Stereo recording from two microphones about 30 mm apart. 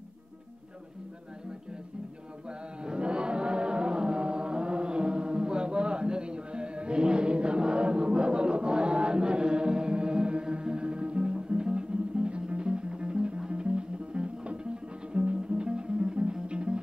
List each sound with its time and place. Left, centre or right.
2.8 s music: right